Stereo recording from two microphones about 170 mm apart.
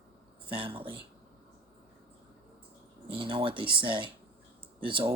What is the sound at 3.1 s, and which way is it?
Speech, 30° right (ahead or behind).